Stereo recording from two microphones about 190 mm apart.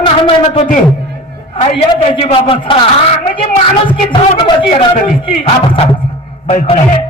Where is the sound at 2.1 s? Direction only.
25° left (ahead or behind).